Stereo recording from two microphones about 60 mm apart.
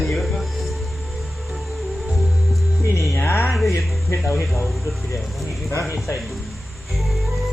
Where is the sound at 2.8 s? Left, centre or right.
Left.